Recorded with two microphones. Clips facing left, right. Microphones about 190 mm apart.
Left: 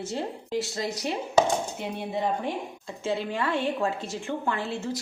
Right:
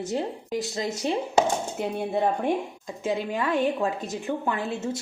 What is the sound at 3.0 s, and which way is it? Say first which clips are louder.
A woman's voice: right 1 dB; 15° right (ahead or behind).